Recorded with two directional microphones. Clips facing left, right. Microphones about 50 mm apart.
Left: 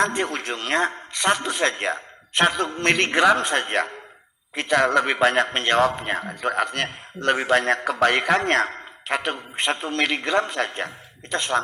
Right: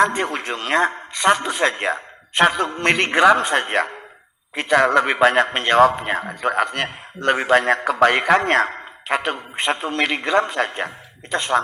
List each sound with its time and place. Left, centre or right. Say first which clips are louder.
0.0 s a man's voice: right 4 dB; right